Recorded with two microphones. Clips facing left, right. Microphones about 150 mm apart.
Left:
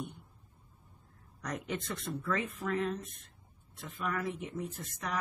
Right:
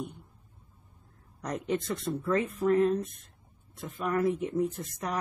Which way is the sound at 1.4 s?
30° right (ahead or behind).